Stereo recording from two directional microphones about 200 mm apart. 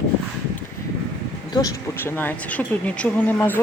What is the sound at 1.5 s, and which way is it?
Speech, 15° left (ahead or behind).